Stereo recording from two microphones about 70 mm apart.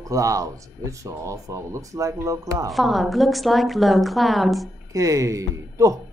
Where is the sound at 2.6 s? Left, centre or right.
Centre.